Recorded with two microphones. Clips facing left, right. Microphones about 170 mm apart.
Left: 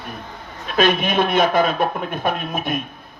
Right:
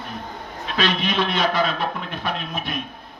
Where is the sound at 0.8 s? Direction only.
50° left (ahead or behind).